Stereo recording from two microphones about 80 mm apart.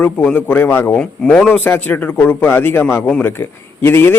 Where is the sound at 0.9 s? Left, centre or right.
Centre.